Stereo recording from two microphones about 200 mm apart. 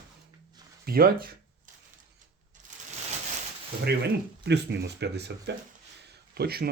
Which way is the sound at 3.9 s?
55° right (ahead or behind).